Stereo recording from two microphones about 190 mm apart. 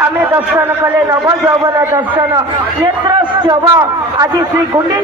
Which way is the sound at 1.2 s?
20° right (ahead or behind).